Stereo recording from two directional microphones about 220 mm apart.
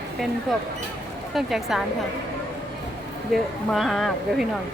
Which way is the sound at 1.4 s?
Centre (ahead or behind).